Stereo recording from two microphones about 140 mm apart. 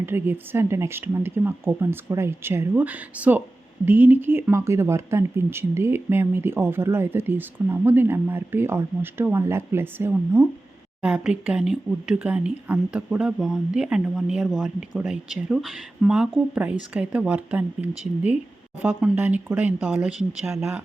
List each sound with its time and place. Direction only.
0.0 s speech: 15° right (ahead or behind)